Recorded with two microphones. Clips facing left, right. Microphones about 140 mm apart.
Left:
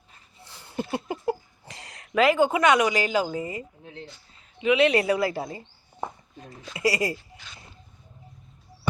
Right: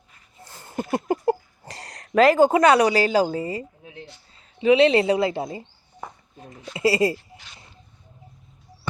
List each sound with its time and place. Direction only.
0.4 s a sound: 45° right (ahead or behind)
4.6 s speech: 30° right (ahead or behind)
6.7 s speech: 25° right (ahead or behind)